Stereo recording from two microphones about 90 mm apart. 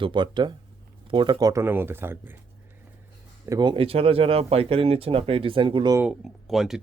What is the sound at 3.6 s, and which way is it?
Speech, 75° right (ahead or behind).